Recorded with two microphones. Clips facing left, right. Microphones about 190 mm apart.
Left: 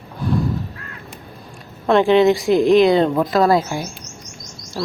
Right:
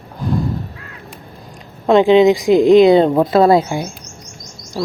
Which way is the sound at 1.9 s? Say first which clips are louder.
Right 3 dB; 15° right (ahead or behind).